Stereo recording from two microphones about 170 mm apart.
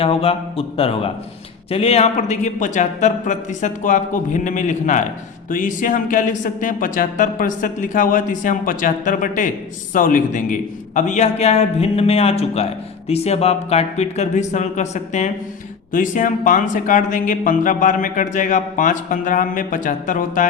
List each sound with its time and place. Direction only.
0.0 s a man's voice: 35° left (ahead or behind); by 20.5 s 50° left (ahead or behind)